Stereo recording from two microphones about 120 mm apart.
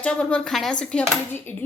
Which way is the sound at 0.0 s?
10° left (ahead or behind).